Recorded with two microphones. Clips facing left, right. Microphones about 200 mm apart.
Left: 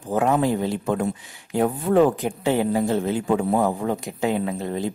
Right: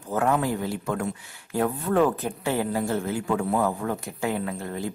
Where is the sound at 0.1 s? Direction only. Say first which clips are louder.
Left 4 dB; 20° left (ahead or behind).